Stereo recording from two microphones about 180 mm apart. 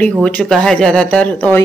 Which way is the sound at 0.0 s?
5° left (ahead or behind).